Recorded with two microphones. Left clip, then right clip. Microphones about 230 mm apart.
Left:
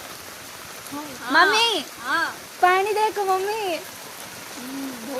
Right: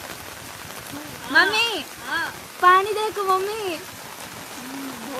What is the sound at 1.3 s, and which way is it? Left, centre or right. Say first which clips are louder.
Speech: left 1 dB; centre.